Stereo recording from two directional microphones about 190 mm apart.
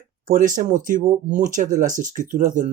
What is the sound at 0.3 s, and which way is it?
Speech, 45° right (ahead or behind).